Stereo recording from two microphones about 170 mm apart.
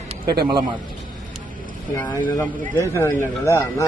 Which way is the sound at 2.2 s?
15° left (ahead or behind).